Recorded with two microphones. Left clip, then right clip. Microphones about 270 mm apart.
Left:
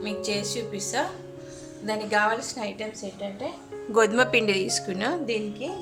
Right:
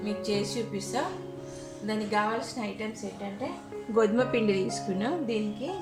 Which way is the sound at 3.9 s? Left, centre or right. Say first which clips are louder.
Left 5 dB; left.